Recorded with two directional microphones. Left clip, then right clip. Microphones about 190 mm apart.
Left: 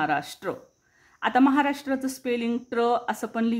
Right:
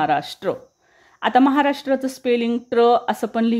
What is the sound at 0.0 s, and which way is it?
Speech, 20° right (ahead or behind).